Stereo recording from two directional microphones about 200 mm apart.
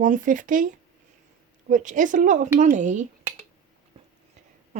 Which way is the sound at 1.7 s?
40° right (ahead or behind).